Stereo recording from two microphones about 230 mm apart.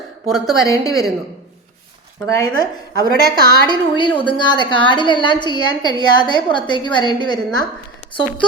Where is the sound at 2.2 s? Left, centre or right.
Centre.